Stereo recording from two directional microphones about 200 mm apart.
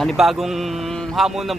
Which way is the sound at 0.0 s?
Centre (ahead or behind).